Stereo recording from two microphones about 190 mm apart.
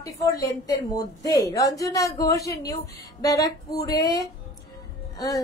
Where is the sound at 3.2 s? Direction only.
20° left (ahead or behind).